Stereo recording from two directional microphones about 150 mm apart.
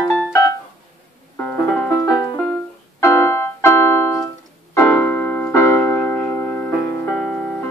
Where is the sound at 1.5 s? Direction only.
10° left (ahead or behind).